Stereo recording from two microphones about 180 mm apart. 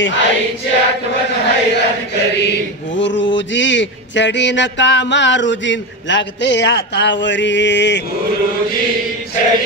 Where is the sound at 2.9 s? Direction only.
90° left; by 8.0 s 75° left (ahead or behind).